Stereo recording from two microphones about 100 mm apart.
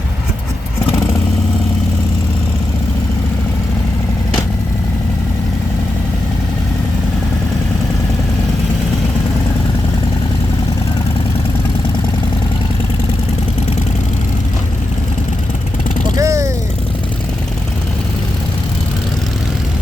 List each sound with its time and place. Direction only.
16.1 s vehicle: 30° right (ahead or behind)